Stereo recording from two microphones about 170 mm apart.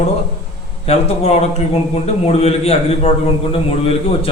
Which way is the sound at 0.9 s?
40° left (ahead or behind).